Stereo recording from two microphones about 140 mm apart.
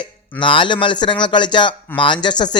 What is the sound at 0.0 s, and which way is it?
Speech, 35° left (ahead or behind).